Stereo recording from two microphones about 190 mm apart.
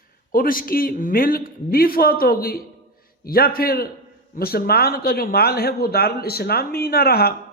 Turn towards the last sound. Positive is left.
turn(degrees=55)  # may be behind; listen again after turning